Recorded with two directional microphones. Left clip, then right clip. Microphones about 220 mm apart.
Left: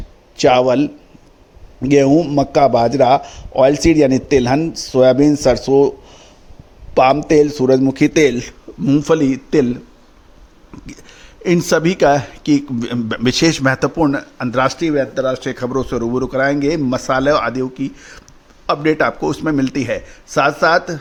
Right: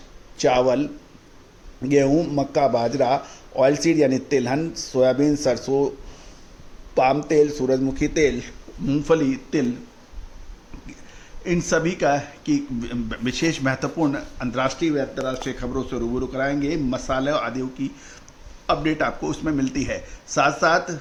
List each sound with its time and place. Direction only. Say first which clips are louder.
0.3 s speech: left 7 dB; 40° left (ahead or behind)
6.9 s speech: left 7 dB; 40° left (ahead or behind)
10.8 s speech: left 6 dB; 45° left (ahead or behind)